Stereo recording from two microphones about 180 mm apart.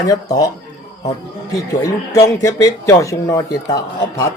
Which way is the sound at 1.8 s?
20° left (ahead or behind).